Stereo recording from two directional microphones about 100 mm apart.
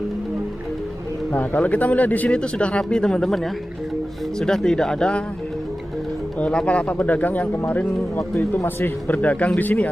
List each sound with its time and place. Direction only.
1.3 s speech: 15° left (ahead or behind)
4.4 s speech: 5° left (ahead or behind)
6.4 s speech: 10° left (ahead or behind)